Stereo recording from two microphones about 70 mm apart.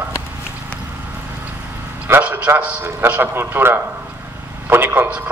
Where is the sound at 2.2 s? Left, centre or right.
Right.